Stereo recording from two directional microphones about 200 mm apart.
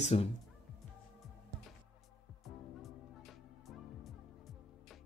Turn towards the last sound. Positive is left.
turn(degrees=0)  # may be behind; listen again after turning